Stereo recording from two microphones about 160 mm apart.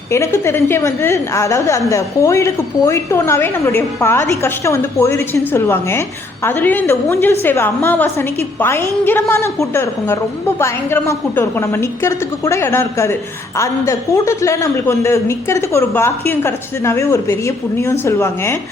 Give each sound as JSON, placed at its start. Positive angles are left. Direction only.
{"t": 0.1, "sound": "a woman's voice", "side_deg": 15}